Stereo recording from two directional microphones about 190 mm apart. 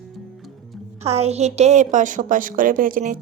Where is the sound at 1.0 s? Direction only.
35° right (ahead or behind).